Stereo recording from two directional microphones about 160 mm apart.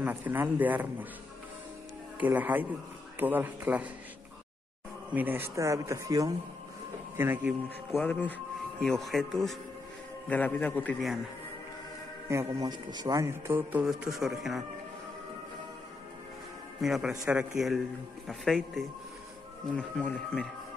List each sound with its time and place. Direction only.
0.0 s a man's voice: 10° right (ahead or behind)
2.1 s a man's voice: 10° right (ahead or behind)
5.1 s a man's voice: 10° right (ahead or behind)
8.0 s a man's voice: 10° left (ahead or behind)
12.3 s a man's voice: 20° right (ahead or behind); by 14.3 s centre (ahead or behind)
16.8 s a man's voice: centre (ahead or behind)